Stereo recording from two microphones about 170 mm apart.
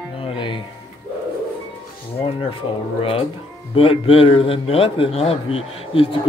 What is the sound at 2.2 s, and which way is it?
A man's voice, 35° left (ahead or behind).